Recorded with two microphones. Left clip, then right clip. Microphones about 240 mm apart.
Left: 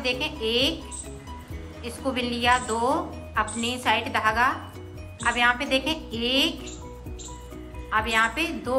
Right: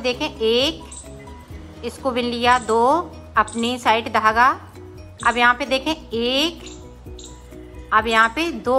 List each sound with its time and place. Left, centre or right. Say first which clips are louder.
0.0 s a woman's voice: right 6 dB; right
1.8 s a woman's voice: right 6 dB; centre
7.9 s a woman's voice: right 7 dB; centre